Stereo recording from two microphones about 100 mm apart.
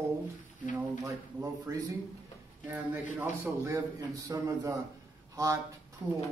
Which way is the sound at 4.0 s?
35° right (ahead or behind).